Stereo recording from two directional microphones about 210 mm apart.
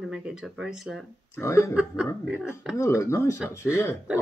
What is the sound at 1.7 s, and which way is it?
Speech, 5° right (ahead or behind).